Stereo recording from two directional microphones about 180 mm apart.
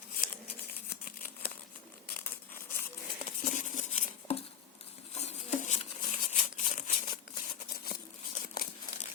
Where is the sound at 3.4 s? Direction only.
45° left (ahead or behind).